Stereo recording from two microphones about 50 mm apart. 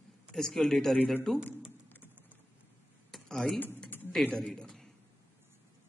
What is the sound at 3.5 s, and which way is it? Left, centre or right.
Speech, left.